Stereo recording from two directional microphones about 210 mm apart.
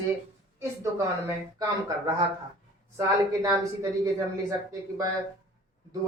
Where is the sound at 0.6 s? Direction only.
15° right (ahead or behind).